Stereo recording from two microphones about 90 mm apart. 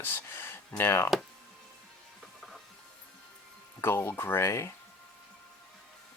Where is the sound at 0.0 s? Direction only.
25° left (ahead or behind).